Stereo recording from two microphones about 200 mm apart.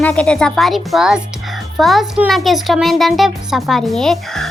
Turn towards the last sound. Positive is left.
turn(degrees=0)  # may be behind; listen again after turning